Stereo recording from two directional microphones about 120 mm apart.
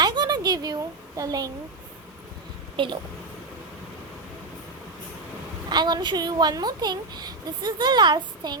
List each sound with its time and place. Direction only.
0.0 s a sound: 35° right (ahead or behind)
2.7 s a woman's voice: 45° right (ahead or behind)
5.6 s a woman's voice: 35° right (ahead or behind)